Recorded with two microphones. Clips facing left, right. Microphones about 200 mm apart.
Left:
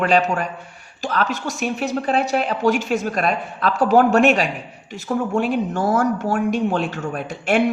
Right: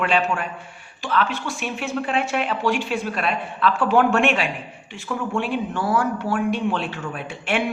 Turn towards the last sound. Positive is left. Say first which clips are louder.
# left 5 dB
turn(degrees=45)  # may be behind; listen again after turning